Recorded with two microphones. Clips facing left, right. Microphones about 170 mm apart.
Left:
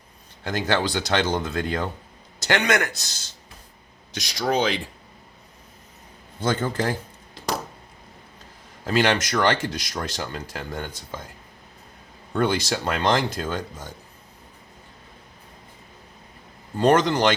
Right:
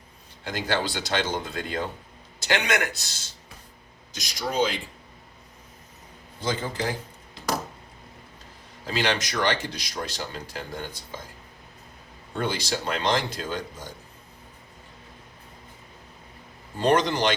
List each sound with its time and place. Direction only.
0.4 s speech: 50° left (ahead or behind)
4.1 s speech: 70° left (ahead or behind)
6.4 s speech: 50° left (ahead or behind)
8.9 s speech: 50° left (ahead or behind)
12.3 s speech: 55° left (ahead or behind)
16.7 s speech: 45° left (ahead or behind)